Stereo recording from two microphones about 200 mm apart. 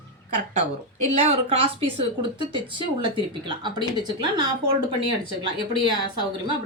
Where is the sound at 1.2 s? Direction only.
30° right (ahead or behind).